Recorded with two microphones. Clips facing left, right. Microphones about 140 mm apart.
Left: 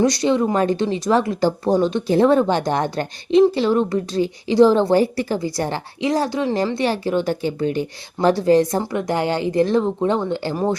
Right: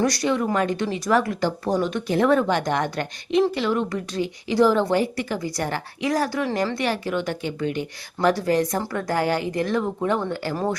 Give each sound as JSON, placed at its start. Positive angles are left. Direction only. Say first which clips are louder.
{"t": 0.0, "sound": "a woman's voice", "louder": "left 5 dB", "side_deg": 25}